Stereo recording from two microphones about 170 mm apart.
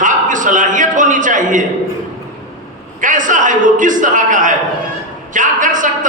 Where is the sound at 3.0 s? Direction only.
50° right (ahead or behind).